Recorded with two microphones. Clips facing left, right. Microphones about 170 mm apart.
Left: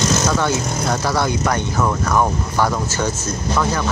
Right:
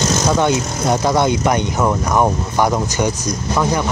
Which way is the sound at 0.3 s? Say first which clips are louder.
Right 3 dB; 20° right (ahead or behind).